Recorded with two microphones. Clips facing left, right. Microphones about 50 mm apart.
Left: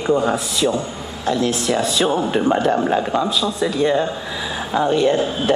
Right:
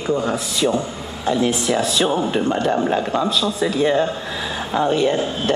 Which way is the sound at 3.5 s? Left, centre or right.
Centre.